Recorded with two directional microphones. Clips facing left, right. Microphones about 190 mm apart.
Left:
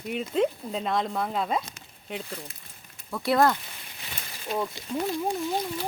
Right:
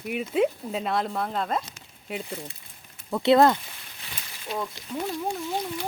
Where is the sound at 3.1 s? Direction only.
25° right (ahead or behind).